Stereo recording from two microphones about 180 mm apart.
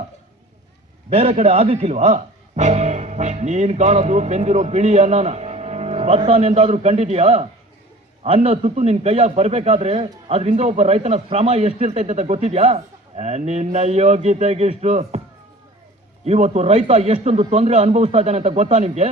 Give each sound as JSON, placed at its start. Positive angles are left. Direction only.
{"t": 1.1, "sound": "a man's voice", "side_deg": -35}
{"t": 16.2, "sound": "a man's voice", "side_deg": -35}